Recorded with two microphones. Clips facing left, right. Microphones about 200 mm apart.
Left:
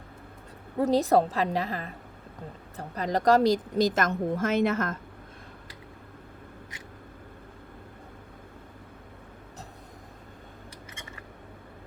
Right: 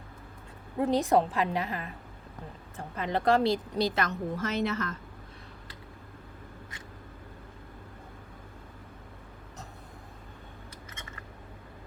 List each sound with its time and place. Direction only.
0.8 s a woman's voice: 40° left (ahead or behind)